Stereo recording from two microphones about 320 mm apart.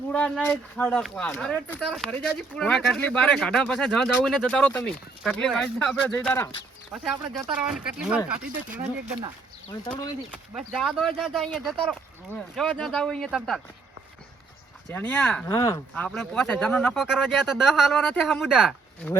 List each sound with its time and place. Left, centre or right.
0.1 s speech: centre
9.8 s speech: centre
10.3 s speech: centre
14.8 s speech: centre